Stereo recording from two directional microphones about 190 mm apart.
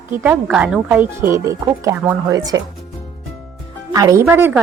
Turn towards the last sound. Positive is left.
turn(degrees=-10)  # may be behind; listen again after turning